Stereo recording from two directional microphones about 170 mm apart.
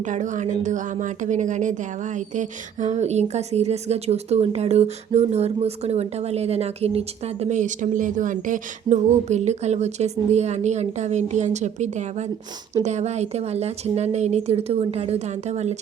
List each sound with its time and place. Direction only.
0.0 s speech: 45° right (ahead or behind)